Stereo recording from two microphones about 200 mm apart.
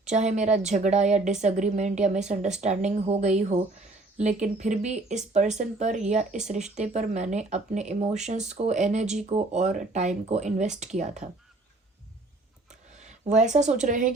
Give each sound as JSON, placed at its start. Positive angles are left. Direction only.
{"t": 0.0, "sound": "speech", "side_deg": -35}
{"t": 13.0, "sound": "speech", "side_deg": -35}